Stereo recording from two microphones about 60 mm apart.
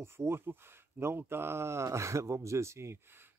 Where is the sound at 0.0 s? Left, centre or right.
Right.